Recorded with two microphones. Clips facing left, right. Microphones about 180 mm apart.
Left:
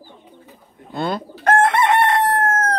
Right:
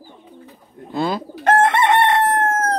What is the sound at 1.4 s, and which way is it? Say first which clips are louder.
Chicken: right 1 dB; 20° right (ahead or behind).